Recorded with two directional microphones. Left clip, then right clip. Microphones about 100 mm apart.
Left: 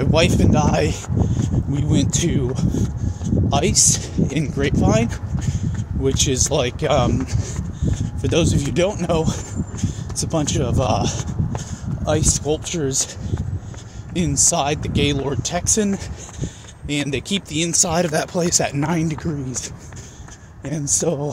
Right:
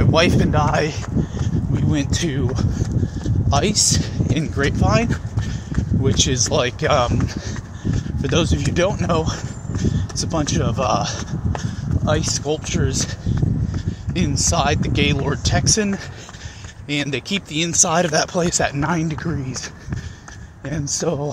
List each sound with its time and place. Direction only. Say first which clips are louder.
0.0 s speech: right 1 dB; 50° left (ahead or behind)
1.9 s speech: left 2 dB; 40° left (ahead or behind)
4.8 s vehicle: even; 45° left (ahead or behind)
6.1 s speech: right 4 dB; 50° left (ahead or behind)
6.5 s speech: right 1 dB; 30° left (ahead or behind)
8.2 s speech: left 1 dB; 45° left (ahead or behind)
9.2 s a sound: left 1 dB; 55° left (ahead or behind)
9.9 s speech: left 2 dB; 50° left (ahead or behind)
14.1 s speech: left 1 dB; 30° left (ahead or behind)
16.9 s speech: even; 30° left (ahead or behind)
18.5 s speech: even; 35° left (ahead or behind)
20.7 s speech: left 1 dB; 40° left (ahead or behind)